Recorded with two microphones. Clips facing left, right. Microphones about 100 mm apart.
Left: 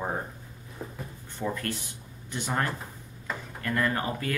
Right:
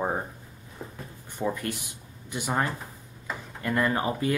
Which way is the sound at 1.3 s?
15° right (ahead or behind).